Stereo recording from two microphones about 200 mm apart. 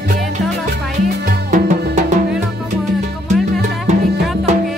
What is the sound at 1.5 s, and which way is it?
Music, 35° right (ahead or behind).